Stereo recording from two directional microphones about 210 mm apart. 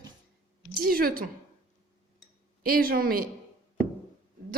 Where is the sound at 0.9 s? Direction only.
45° right (ahead or behind).